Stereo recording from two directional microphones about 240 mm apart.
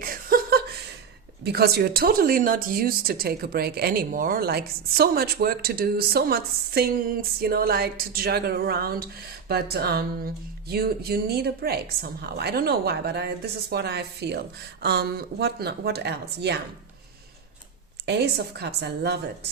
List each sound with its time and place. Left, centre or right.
0.0 s chuckle: right
1.5 s speech: right
18.0 s a woman's voice: right